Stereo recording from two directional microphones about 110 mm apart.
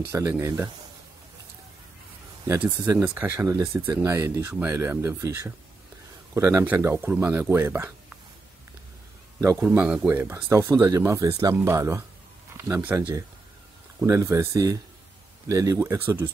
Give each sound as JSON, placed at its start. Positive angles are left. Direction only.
{"t": 0.1, "sound": "speech", "side_deg": -20}
{"t": 2.8, "sound": "speech", "side_deg": -25}
{"t": 3.2, "sound": "speech", "side_deg": -15}
{"t": 3.4, "sound": "speech", "side_deg": -25}
{"t": 9.4, "sound": "speech", "side_deg": -20}
{"t": 12.5, "sound": "speech", "side_deg": -20}
{"t": 14.0, "sound": "speech", "side_deg": -30}